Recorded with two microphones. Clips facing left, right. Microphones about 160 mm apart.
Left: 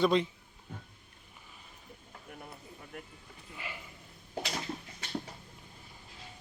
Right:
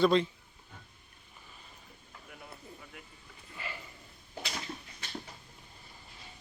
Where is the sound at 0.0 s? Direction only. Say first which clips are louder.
Right 2 dB; 15° left (ahead or behind).